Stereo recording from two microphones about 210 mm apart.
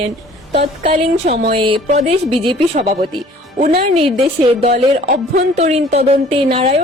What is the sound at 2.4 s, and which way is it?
Speech, 30° right (ahead or behind).